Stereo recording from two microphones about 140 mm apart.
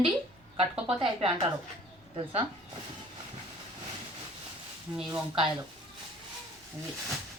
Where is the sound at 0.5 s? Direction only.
45° right (ahead or behind).